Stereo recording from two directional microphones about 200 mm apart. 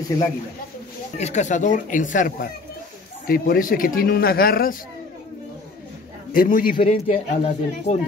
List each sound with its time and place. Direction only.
1.1 s speech: 35° left (ahead or behind)
6.3 s speech: 45° left (ahead or behind)
7.1 s speech: 35° left (ahead or behind)